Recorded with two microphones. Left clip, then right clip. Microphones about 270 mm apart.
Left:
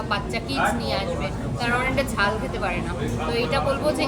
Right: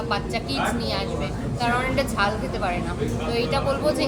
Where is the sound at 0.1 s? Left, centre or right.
Centre.